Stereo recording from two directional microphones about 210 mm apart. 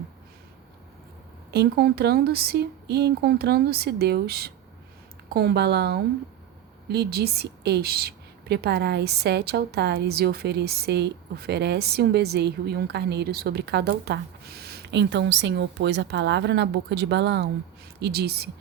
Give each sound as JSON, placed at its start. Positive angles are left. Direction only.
{"t": 1.5, "sound": "a woman's voice", "side_deg": -50}